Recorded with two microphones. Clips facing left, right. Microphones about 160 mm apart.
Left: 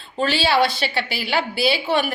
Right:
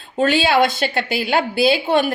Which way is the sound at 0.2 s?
45° right (ahead or behind).